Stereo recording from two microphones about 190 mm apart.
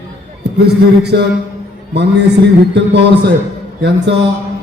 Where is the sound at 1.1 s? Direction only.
65° right (ahead or behind).